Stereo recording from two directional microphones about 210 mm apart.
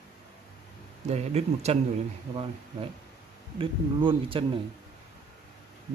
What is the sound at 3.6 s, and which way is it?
Speech, 25° right (ahead or behind).